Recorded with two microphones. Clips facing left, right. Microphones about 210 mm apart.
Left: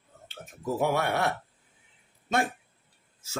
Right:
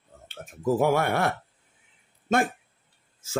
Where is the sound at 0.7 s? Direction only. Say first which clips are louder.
Right 4 dB; 50° right (ahead or behind).